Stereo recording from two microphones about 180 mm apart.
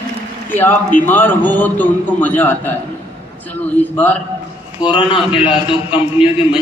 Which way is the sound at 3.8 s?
10° left (ahead or behind).